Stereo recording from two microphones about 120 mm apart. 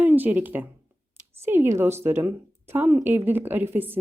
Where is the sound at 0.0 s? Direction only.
15° right (ahead or behind).